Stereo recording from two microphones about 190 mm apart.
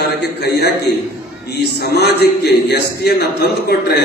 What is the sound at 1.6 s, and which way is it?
A man's voice, 60° left (ahead or behind).